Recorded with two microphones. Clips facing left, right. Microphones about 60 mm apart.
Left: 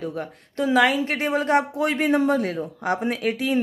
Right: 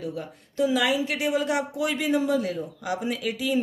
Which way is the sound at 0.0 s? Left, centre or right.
Left.